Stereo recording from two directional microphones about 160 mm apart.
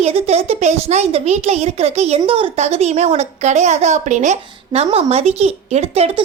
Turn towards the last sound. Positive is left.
turn(degrees=-40)  # may be behind; listen again after turning